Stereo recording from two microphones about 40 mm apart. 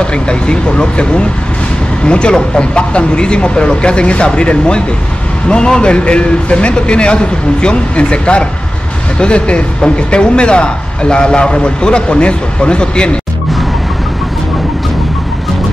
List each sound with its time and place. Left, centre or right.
0.0 s speech: left